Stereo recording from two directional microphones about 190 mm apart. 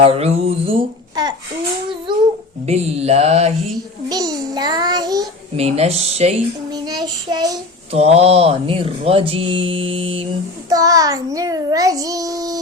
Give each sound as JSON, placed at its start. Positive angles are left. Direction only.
{"t": 0.0, "sound": "speech", "side_deg": -30}
{"t": 2.1, "sound": "babbling", "side_deg": -25}
{"t": 2.6, "sound": "speech", "side_deg": -35}
{"t": 4.1, "sound": "speech", "side_deg": -20}
{"t": 5.5, "sound": "speech", "side_deg": -35}
{"t": 6.7, "sound": "speech", "side_deg": -20}
{"t": 7.9, "sound": "speech", "side_deg": -35}